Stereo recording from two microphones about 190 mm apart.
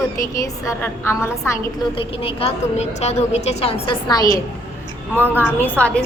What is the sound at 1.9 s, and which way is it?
A woman's voice, 30° left (ahead or behind).